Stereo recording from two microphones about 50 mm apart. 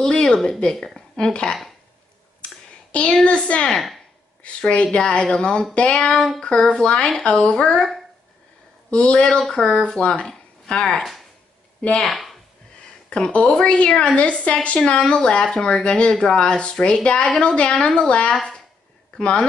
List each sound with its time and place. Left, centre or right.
0.0 s a sound: centre
0.7 s a woman's voice: centre
1.1 s speech: centre
2.9 s a woman's voice: left
3.7 s a woman's voice: centre
4.4 s a woman's voice: left
8.9 s a woman's voice: centre
12.0 s speech: centre
13.1 s a woman's voice: left
18.3 s speech: centre
19.1 s speech: centre